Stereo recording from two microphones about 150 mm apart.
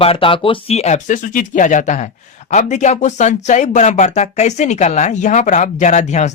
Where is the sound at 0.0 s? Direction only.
40° left (ahead or behind).